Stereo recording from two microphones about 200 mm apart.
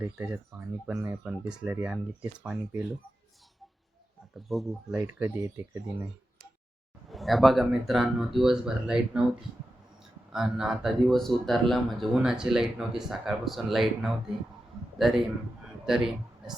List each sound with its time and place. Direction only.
0.0 s speech: 10° right (ahead or behind)
4.4 s speech: centre (ahead or behind)
7.1 s speech: centre (ahead or behind)
10.3 s a man's voice: centre (ahead or behind)